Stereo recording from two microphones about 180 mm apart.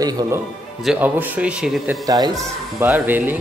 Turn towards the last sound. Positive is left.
turn(degrees=-10)  # may be behind; listen again after turning